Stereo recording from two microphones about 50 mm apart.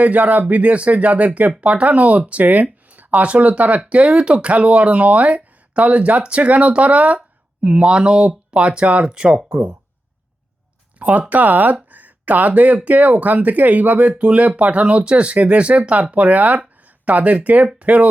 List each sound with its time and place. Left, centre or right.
0.0 s speech: right
11.0 s speech: right